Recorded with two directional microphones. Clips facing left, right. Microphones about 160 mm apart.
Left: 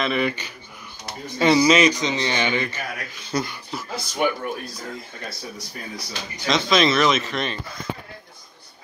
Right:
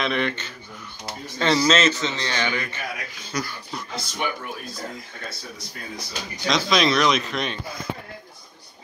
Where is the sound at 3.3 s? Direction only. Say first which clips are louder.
Left 4 dB; 30° left (ahead or behind).